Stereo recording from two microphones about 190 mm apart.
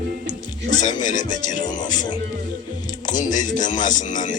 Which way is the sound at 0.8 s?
40° left (ahead or behind).